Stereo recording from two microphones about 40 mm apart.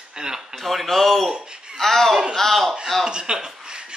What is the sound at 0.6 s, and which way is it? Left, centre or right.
Speech, centre.